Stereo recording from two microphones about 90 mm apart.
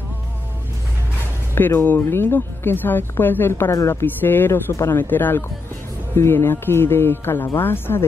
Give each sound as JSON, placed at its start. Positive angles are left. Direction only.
{"t": 1.5, "sound": "speech", "side_deg": 25}